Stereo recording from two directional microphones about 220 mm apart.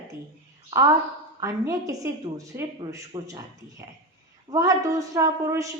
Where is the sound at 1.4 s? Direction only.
15° right (ahead or behind).